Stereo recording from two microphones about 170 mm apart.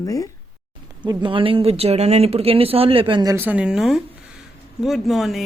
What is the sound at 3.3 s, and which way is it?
Speech, 10° right (ahead or behind).